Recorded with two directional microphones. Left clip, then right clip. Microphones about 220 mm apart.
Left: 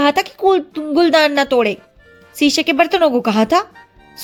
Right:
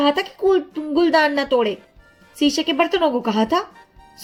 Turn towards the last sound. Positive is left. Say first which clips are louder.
# left 5 dB
turn(degrees=50)  # may be behind; listen again after turning